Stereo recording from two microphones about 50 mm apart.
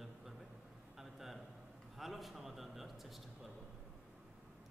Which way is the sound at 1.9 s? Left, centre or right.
Centre.